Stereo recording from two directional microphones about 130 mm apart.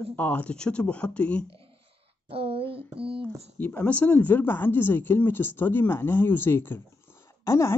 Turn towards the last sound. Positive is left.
turn(degrees=25)  # may be behind; listen again after turning